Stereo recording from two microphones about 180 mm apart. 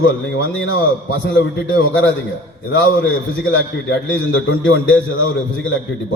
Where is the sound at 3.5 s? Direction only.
90° left.